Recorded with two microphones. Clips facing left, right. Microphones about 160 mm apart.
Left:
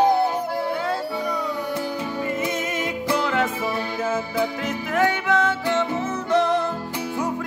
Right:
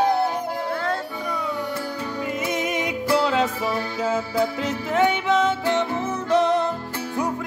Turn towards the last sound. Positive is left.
turn(degrees=-20)  # may be behind; listen again after turning